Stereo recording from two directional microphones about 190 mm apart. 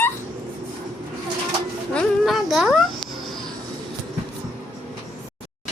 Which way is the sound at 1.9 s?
Centre (ahead or behind).